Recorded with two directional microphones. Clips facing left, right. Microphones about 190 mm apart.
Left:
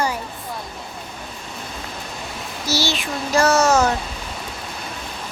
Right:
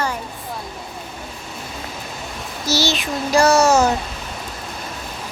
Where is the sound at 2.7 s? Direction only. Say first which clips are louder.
Right 3 dB; 20° right (ahead or behind).